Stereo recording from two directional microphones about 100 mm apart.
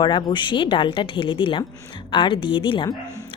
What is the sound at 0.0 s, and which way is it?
Speech, 50° left (ahead or behind).